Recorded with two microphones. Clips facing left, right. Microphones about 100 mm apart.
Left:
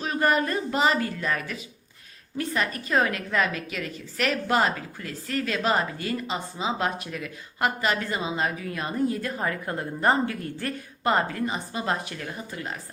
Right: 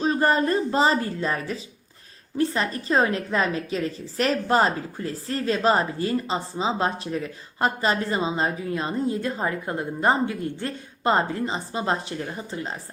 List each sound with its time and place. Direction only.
0.0 s a woman's voice: 30° right (ahead or behind)